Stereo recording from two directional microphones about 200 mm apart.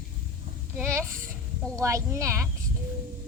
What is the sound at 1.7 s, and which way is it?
Speech, 15° right (ahead or behind).